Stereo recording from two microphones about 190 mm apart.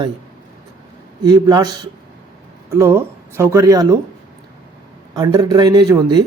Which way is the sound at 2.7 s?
15° right (ahead or behind).